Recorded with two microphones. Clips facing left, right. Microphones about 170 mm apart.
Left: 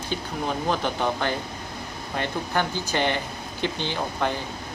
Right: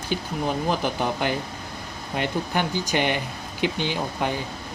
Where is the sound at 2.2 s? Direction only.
15° right (ahead or behind).